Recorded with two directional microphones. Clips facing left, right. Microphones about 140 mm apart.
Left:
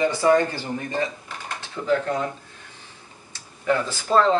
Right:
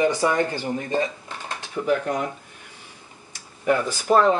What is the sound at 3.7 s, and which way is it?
Speech, 15° right (ahead or behind).